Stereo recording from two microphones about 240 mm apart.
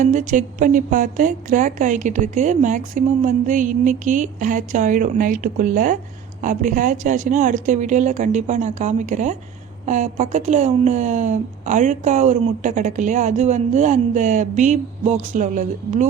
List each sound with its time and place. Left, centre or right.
0.0 s a woman's voice: right